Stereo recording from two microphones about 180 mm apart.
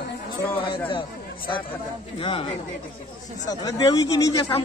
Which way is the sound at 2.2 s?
30° left (ahead or behind).